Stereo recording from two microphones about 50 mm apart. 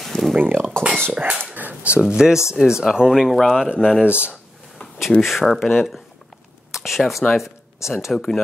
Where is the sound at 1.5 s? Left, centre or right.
Right.